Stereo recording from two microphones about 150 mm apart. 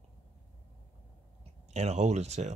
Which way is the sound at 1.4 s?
45° right (ahead or behind).